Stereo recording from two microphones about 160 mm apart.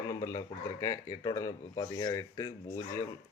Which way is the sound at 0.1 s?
20° left (ahead or behind).